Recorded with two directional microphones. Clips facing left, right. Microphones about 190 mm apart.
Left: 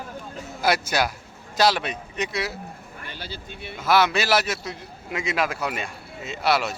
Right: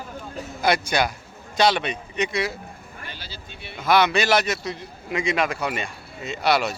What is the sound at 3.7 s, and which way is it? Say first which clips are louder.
A man's voice: right 1 dB; 5° left (ahead or behind).